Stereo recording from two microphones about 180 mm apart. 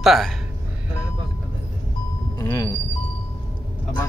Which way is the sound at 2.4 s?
20° left (ahead or behind).